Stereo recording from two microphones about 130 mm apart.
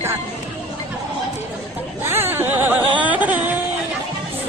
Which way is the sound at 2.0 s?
15° right (ahead or behind).